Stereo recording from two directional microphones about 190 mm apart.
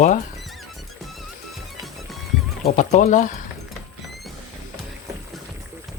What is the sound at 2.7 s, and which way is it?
Speech, 40° left (ahead or behind).